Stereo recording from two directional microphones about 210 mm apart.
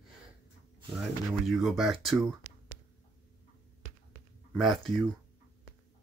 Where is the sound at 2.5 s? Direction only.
60° right (ahead or behind).